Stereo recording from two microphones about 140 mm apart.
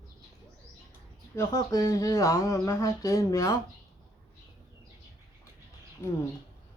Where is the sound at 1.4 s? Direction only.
25° left (ahead or behind).